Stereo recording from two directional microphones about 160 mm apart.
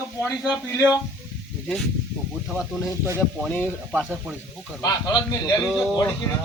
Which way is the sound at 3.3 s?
5° left (ahead or behind).